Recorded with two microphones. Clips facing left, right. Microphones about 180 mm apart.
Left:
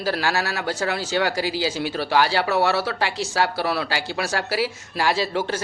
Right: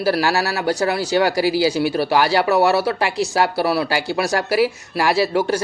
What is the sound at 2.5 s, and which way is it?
A man's voice, 40° right (ahead or behind).